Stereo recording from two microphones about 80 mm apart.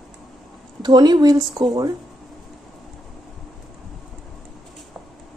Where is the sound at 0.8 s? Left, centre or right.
Right.